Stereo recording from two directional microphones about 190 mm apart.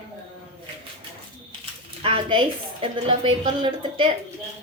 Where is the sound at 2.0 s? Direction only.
30° right (ahead or behind).